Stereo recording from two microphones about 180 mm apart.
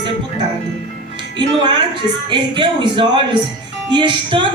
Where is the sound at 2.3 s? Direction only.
25° right (ahead or behind).